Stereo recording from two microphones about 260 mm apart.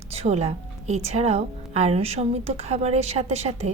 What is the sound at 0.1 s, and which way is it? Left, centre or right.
A woman's voice, right.